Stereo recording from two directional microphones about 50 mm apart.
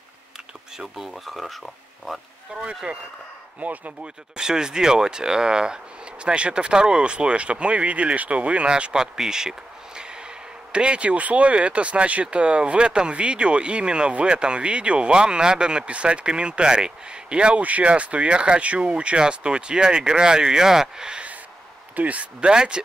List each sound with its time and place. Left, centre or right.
0.7 s speech: centre
2.5 s speech: centre
3.6 s speech: right
4.4 s speech: centre
21.9 s speech: right
22.5 s speech: centre